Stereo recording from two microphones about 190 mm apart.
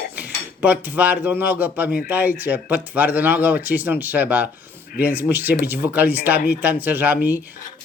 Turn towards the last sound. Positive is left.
turn(degrees=-10)  # may be behind; listen again after turning